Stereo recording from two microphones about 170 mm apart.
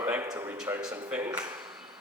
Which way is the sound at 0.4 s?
10° right (ahead or behind).